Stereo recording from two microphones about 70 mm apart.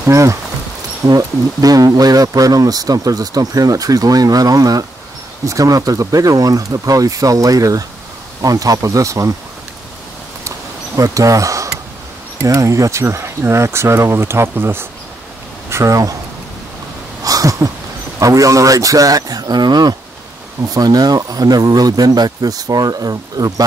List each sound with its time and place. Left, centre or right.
0.0 s speech: right
1.0 s speech: right
11.0 s speech: right
13.0 s speech: right
15.7 s speech: right
17.2 s a sound: right
18.2 s speech: right
20.7 s speech: right